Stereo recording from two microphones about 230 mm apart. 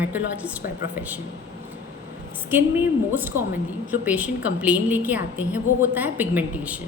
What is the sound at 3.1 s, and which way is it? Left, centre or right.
A woman's voice, centre.